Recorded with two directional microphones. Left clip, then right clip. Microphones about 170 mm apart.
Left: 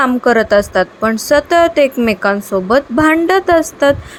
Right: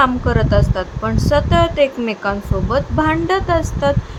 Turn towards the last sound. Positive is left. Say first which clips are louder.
# left 6 dB
turn(degrees=25)  # may be behind; listen again after turning